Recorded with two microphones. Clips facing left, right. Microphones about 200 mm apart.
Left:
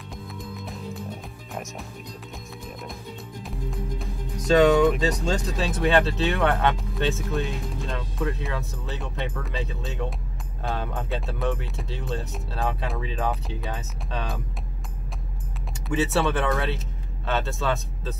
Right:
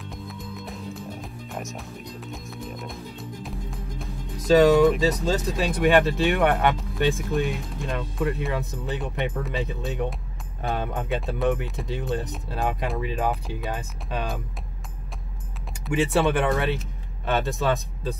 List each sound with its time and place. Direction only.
1.5 s speech: centre (ahead or behind)
4.6 s speech: centre (ahead or behind)
5.6 s speech: 10° right (ahead or behind)
15.9 s speech: 15° right (ahead or behind)